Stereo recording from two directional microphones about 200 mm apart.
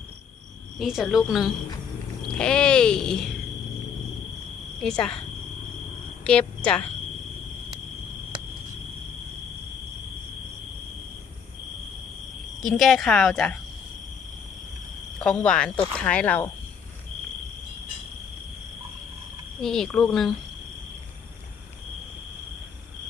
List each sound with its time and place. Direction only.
0.8 s speech: centre (ahead or behind)
4.8 s speech: 5° left (ahead or behind)
6.2 s speech: 5° left (ahead or behind)
12.6 s speech: centre (ahead or behind)
15.2 s speech: 5° left (ahead or behind)
19.6 s speech: centre (ahead or behind)